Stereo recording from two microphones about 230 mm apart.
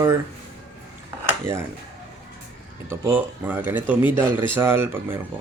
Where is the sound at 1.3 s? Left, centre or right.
Centre.